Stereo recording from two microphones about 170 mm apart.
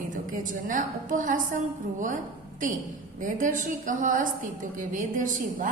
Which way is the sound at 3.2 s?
50° right (ahead or behind).